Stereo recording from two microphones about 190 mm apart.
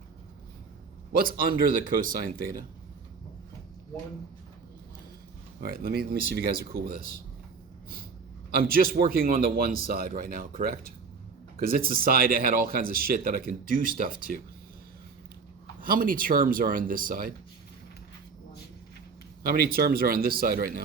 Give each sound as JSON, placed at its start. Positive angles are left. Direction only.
{"t": 1.1, "sound": "speech", "side_deg": -50}
{"t": 5.5, "sound": "speech", "side_deg": -50}
{"t": 8.4, "sound": "a man's voice", "side_deg": -50}
{"t": 15.8, "sound": "speech", "side_deg": -45}
{"t": 19.4, "sound": "speech", "side_deg": -55}